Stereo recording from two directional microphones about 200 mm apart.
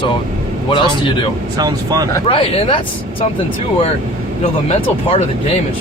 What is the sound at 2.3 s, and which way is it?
Speech, 25° left (ahead or behind).